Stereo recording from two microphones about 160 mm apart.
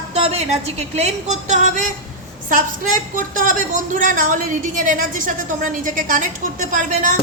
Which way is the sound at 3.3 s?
55° right (ahead or behind).